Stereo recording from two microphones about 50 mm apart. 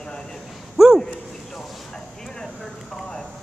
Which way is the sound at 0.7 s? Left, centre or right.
Centre.